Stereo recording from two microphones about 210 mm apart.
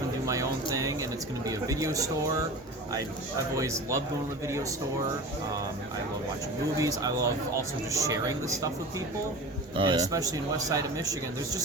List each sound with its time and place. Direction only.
0.3 s a sound: 15° right (ahead or behind)
1.5 s speech: 15° right (ahead or behind)
3.5 s speech: 15° right (ahead or behind)
6.7 s speech: 15° right (ahead or behind)
9.7 s speech: 20° right (ahead or behind)